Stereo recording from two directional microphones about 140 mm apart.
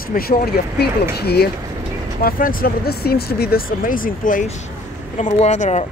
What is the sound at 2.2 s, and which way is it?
Speech, 90° left.